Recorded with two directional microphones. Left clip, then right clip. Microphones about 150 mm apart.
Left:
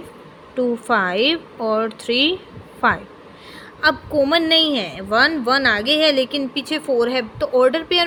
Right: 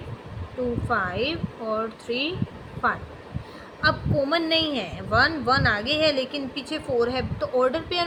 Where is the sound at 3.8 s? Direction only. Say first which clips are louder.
Left 6 dB; 90° left.